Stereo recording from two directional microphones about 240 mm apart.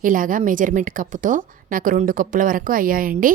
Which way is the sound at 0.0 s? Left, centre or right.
Right.